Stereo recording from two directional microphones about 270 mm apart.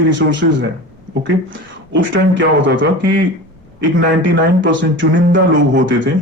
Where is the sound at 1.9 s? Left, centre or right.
Right.